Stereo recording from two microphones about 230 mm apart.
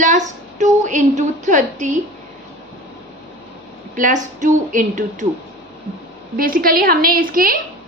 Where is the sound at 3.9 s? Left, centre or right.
Right.